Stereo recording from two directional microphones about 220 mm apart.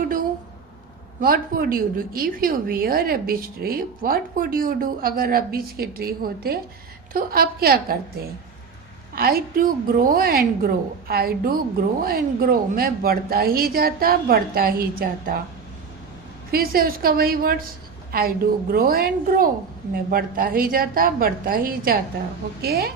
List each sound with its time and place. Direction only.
1.2 s a woman's voice: 40° right (ahead or behind)
9.1 s speech: 40° right (ahead or behind)
16.5 s a woman's voice: 40° right (ahead or behind)